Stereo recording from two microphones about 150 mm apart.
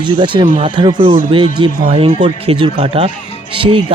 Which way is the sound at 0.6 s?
30° right (ahead or behind).